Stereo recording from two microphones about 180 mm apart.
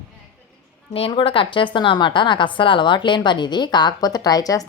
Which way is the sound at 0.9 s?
30° left (ahead or behind).